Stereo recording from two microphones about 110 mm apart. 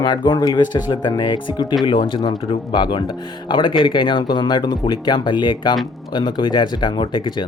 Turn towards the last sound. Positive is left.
turn(degrees=45)  # may be behind; listen again after turning